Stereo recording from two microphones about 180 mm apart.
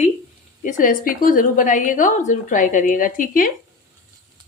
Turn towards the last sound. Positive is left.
turn(degrees=50)  # may be behind; listen again after turning